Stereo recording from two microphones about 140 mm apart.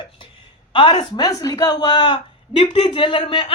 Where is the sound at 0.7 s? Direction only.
35° left (ahead or behind).